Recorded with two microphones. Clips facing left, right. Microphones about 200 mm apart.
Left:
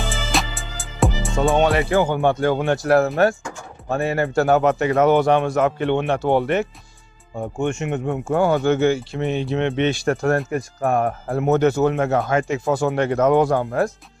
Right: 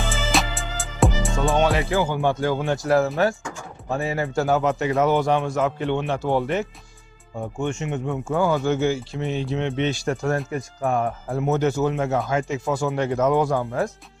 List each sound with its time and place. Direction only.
0.1 s music: centre (ahead or behind)
1.5 s music: 55° left (ahead or behind)
1.9 s speech: 55° left (ahead or behind)
7.6 s speech: 55° left (ahead or behind)
10.3 s speech: 50° left (ahead or behind); by 13.9 s 70° left (ahead or behind)